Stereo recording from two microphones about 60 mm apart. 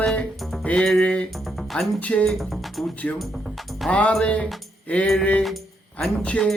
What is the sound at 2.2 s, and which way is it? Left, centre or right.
Speech, centre.